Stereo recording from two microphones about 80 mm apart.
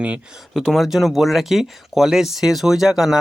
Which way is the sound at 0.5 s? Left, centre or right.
Centre.